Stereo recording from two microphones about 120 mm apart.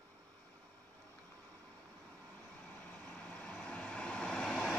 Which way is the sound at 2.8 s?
10° left (ahead or behind).